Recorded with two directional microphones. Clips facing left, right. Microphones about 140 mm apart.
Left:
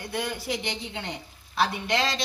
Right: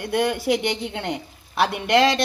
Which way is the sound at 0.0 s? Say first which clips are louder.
Right 9 dB; 65° right (ahead or behind).